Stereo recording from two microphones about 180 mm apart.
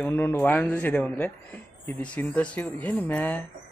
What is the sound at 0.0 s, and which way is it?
A woman's voice, 10° left (ahead or behind).